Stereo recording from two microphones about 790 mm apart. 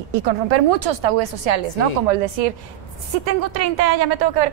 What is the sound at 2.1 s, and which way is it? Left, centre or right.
A woman's voice, right.